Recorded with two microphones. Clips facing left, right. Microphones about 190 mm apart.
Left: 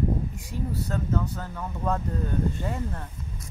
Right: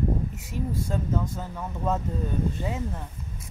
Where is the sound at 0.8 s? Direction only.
10° right (ahead or behind).